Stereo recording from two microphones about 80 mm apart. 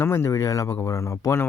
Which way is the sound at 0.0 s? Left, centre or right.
Left.